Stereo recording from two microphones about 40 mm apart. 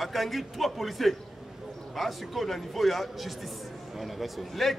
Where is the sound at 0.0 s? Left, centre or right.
Centre.